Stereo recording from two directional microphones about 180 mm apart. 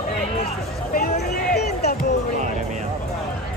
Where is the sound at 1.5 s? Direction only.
60° left (ahead or behind).